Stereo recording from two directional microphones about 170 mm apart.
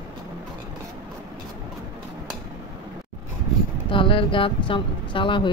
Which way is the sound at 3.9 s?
30° left (ahead or behind).